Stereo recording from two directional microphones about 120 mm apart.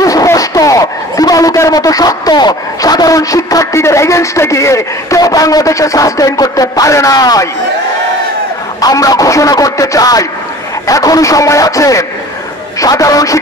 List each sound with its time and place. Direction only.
0.0 s a man's voice: 30° left (ahead or behind)
8.8 s speech: 30° left (ahead or behind)